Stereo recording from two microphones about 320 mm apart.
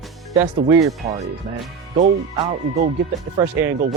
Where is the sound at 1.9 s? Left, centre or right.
Centre.